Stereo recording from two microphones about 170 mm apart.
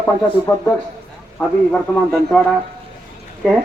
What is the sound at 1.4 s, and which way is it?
Speech, 10° left (ahead or behind).